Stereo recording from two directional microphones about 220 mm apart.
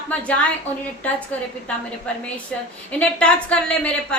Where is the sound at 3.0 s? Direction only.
5° left (ahead or behind).